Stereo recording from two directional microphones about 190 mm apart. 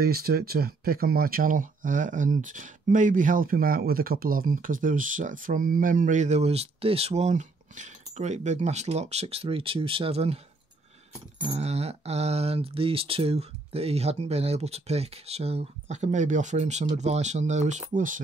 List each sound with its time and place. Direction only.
0.0 s speech: 55° right (ahead or behind); by 10.4 s 30° right (ahead or behind)
11.5 s speech: 35° right (ahead or behind)